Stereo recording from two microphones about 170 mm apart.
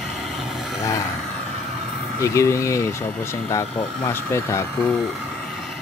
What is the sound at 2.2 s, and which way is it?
Speech, 15° left (ahead or behind).